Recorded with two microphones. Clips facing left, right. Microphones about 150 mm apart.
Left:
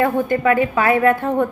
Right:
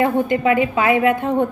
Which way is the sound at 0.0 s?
20° right (ahead or behind).